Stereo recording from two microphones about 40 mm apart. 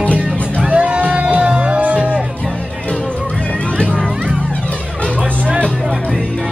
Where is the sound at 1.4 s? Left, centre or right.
Right.